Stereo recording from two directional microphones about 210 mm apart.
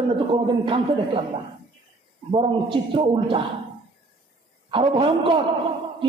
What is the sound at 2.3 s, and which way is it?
Speech, 25° right (ahead or behind).